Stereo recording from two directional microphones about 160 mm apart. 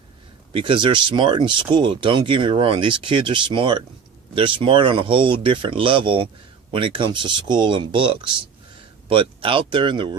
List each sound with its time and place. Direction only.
0.5 s speech: 30° right (ahead or behind)